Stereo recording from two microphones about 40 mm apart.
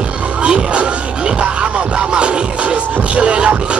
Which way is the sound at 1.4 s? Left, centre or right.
Right.